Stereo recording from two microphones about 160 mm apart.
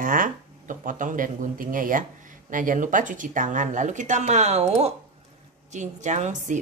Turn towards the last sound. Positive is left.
turn(degrees=-50)  # may be behind; listen again after turning